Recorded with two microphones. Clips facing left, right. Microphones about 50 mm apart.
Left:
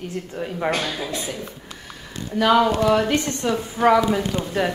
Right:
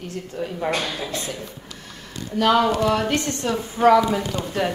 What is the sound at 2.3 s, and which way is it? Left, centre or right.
A woman's voice, centre.